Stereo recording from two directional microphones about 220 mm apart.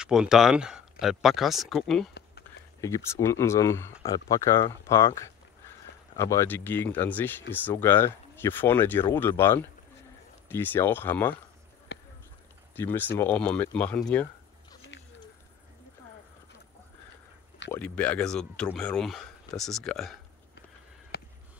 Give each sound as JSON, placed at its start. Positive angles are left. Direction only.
{"t": 0.0, "sound": "speech", "side_deg": -5}
{"t": 2.8, "sound": "speech", "side_deg": 15}
{"t": 11.9, "sound": "basketball bounce", "side_deg": 50}
{"t": 12.7, "sound": "speech", "side_deg": 10}
{"t": 17.6, "sound": "speech", "side_deg": 5}
{"t": 21.1, "sound": "a sound", "side_deg": 45}